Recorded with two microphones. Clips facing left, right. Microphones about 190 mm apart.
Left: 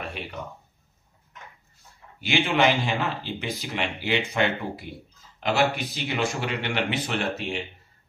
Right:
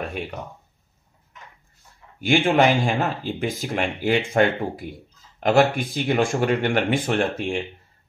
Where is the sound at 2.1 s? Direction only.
50° right (ahead or behind).